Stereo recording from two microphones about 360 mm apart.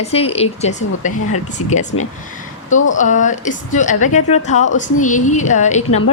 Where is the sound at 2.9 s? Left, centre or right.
Left.